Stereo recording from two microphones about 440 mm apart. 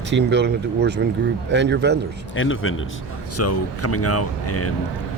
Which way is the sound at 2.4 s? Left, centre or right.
Left.